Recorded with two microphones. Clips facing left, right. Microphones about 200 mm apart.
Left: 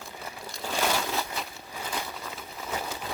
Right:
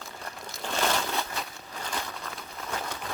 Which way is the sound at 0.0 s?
5° left (ahead or behind).